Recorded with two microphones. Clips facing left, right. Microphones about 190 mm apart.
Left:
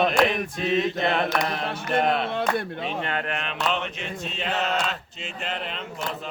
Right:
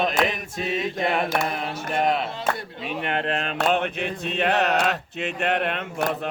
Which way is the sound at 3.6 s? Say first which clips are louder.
Right 6 dB; 55° right (ahead or behind).